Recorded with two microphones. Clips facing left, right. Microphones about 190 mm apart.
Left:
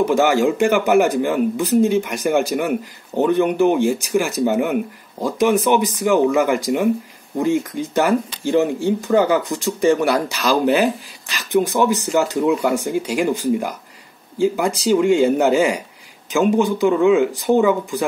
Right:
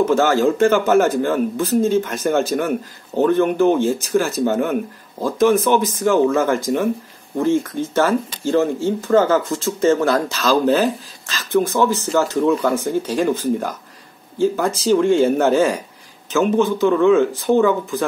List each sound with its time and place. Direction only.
0.0 s speech: 15° left (ahead or behind)